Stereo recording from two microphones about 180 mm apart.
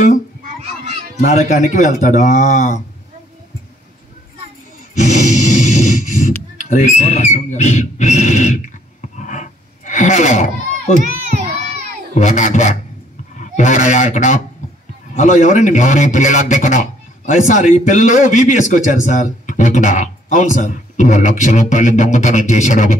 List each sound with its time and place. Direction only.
1.2 s a man's voice: 40° left (ahead or behind)
4.9 s snort: 40° left (ahead or behind)
6.6 s a man's voice: 40° left (ahead or behind)
9.2 s a sound: 40° left (ahead or behind)
12.1 s a man's voice: 40° left (ahead or behind)